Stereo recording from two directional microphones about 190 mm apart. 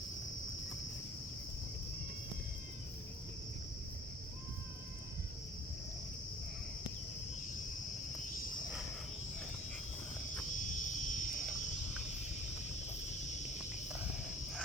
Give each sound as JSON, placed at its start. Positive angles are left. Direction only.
{"t": 10.6, "sound": "wild animals", "side_deg": 45}